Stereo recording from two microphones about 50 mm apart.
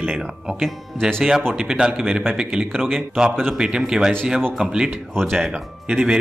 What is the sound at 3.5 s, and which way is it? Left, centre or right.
A man's voice, centre.